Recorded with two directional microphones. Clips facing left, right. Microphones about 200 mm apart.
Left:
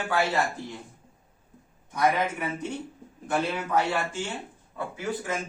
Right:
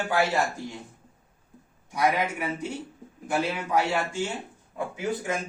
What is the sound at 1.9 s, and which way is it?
A man's voice, 10° right (ahead or behind).